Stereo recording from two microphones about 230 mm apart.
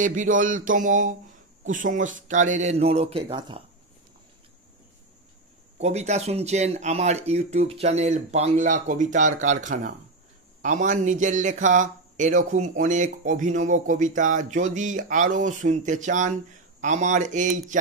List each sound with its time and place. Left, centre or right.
0.0 s a man's voice: right
5.8 s a man's voice: right